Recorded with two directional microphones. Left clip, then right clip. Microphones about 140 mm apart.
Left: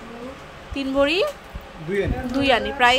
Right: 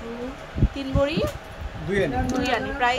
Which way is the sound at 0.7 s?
35° left (ahead or behind).